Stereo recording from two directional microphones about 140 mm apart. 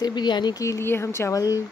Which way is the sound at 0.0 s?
30° left (ahead or behind).